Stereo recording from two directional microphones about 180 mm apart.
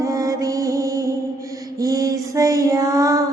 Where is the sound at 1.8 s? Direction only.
20° right (ahead or behind).